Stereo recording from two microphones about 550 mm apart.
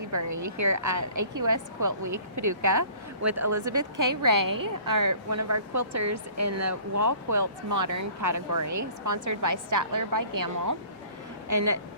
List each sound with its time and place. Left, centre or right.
0.1 s a woman's voice: right